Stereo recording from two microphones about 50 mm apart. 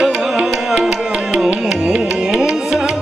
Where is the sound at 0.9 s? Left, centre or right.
Right.